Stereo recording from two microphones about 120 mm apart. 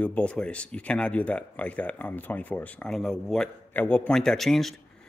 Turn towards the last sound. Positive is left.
turn(degrees=0)  # may be behind; listen again after turning